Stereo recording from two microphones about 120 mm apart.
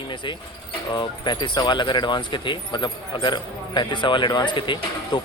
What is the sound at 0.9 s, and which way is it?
Speech, 40° left (ahead or behind).